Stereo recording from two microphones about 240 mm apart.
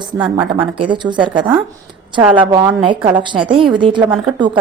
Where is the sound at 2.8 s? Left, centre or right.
Right.